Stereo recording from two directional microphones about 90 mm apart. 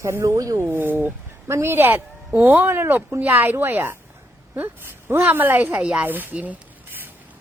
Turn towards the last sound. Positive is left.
turn(degrees=-15)  # may be behind; listen again after turning